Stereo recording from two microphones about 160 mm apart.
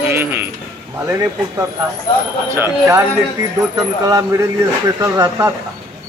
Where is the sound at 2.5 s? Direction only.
15° right (ahead or behind).